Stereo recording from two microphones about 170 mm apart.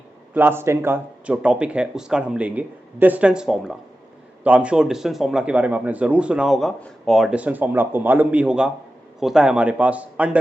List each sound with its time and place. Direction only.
0.3 s a man's voice: 15° right (ahead or behind)